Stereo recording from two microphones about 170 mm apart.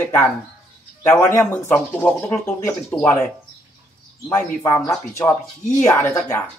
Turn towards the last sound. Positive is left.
turn(degrees=15)  # may be behind; listen again after turning